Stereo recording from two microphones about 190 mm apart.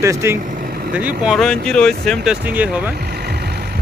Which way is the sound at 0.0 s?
15° right (ahead or behind).